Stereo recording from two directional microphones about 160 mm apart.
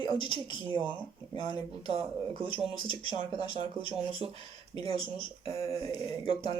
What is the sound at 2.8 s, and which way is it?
Speech, 30° left (ahead or behind).